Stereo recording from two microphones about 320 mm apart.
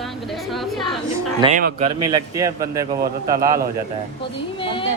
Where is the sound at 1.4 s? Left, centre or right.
Right.